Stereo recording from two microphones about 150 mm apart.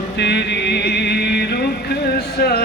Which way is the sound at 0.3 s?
90° left.